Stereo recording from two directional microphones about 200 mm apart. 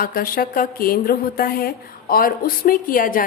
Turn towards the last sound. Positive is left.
turn(degrees=45)  # may be behind; listen again after turning